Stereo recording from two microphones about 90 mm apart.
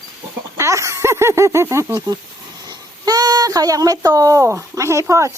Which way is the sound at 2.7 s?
45° right (ahead or behind).